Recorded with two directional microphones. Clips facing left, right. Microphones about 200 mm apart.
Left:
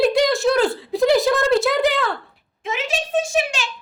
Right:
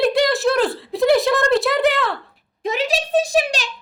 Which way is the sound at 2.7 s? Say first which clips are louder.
Right 4 dB; 35° right (ahead or behind).